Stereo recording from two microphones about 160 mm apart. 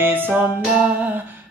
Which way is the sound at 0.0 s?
10° right (ahead or behind).